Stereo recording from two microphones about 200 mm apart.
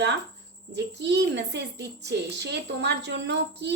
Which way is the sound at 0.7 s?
60° right (ahead or behind).